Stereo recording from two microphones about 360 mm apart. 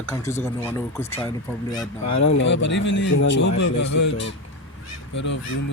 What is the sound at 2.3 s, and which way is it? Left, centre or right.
Speech, left.